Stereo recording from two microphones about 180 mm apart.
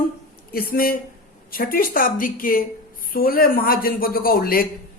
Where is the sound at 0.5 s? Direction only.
55° left (ahead or behind).